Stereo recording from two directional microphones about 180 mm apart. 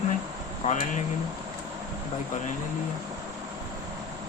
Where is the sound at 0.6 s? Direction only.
40° left (ahead or behind).